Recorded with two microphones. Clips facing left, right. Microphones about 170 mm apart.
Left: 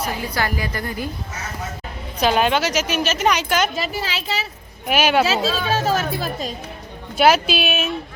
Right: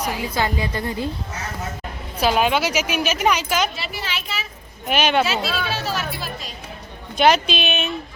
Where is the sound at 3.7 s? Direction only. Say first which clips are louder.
Left 5 dB; 40° left (ahead or behind).